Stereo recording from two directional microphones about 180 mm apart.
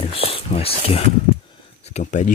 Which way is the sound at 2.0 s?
45° left (ahead or behind).